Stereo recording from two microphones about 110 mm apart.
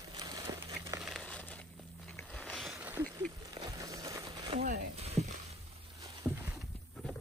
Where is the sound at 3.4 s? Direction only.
35° right (ahead or behind).